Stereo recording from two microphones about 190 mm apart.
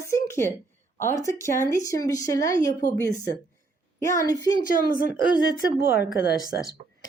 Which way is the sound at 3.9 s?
15° left (ahead or behind).